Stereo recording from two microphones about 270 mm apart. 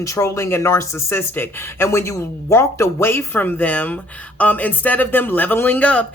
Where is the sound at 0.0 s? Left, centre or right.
Centre.